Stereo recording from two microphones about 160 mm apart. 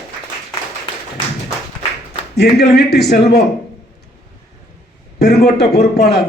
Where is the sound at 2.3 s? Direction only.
90° left.